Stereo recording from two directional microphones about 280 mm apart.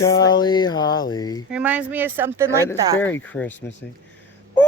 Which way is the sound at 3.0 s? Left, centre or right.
Centre.